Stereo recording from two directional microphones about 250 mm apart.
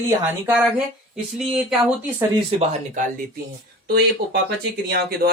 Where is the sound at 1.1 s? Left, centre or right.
Centre.